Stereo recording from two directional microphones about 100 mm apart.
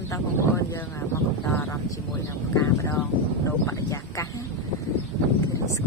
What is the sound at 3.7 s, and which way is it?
Speech, 30° left (ahead or behind).